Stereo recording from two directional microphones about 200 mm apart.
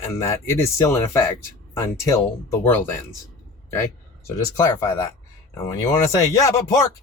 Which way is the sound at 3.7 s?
15° left (ahead or behind).